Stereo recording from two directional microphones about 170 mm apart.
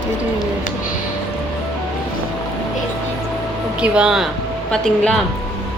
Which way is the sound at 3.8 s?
5° right (ahead or behind).